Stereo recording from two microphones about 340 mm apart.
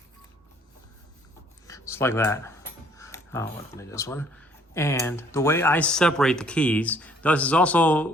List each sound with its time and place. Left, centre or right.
1.6 s speech: centre